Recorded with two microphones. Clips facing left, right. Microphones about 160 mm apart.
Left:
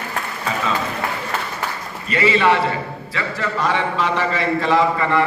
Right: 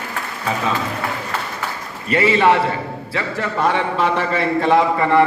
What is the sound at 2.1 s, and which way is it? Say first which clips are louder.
Speech: right 2 dB; 50° right (ahead or behind).